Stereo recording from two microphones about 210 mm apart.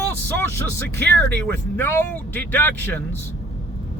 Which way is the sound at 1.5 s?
10° left (ahead or behind).